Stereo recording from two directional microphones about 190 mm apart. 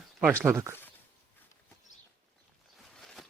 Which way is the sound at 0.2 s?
5° right (ahead or behind).